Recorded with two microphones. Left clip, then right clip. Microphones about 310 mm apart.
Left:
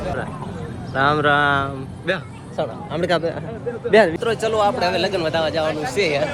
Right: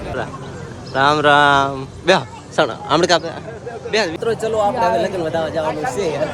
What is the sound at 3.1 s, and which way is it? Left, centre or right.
Speech, centre.